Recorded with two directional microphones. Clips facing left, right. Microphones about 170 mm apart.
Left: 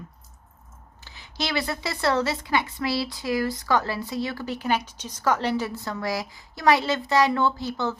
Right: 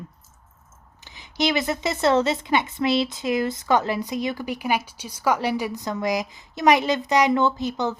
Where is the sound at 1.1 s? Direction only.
20° right (ahead or behind).